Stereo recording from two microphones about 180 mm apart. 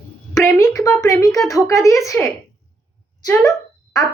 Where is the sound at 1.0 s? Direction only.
20° left (ahead or behind).